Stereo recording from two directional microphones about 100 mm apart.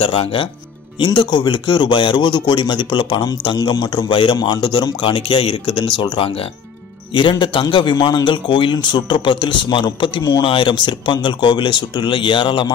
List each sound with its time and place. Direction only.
0.0 s speech: 65° left (ahead or behind)
0.9 s a man's voice: 50° left (ahead or behind)